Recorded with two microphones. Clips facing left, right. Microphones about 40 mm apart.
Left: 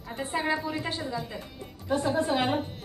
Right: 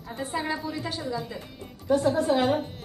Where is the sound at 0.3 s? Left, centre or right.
Centre.